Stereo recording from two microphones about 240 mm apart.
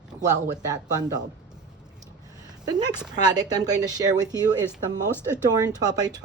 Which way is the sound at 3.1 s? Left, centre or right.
Centre.